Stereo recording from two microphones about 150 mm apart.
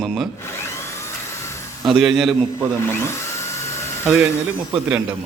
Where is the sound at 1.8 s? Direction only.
5° right (ahead or behind).